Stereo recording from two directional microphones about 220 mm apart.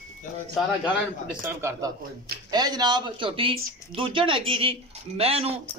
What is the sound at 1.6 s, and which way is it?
Speech, 10° right (ahead or behind).